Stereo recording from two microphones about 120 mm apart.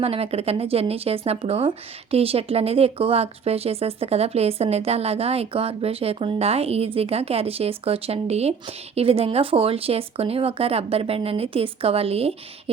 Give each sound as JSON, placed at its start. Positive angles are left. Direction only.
{"t": 0.0, "sound": "speech", "side_deg": -55}